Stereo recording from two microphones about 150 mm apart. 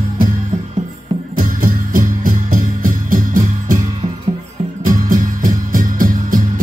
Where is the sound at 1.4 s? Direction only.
65° right (ahead or behind).